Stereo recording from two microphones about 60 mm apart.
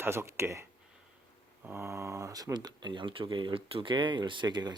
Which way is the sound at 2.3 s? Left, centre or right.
Right.